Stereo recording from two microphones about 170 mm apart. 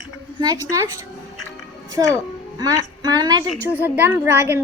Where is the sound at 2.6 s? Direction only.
20° right (ahead or behind).